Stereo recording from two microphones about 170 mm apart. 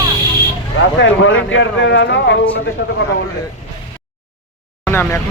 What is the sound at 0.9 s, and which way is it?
Speech, 90° left.